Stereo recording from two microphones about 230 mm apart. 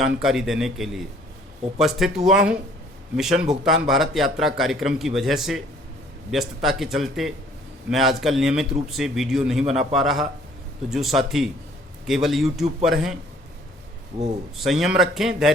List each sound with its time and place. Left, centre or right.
0.2 s speech: centre
14.5 s speech: centre